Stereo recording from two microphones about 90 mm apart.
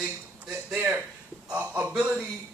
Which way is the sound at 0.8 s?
20° right (ahead or behind).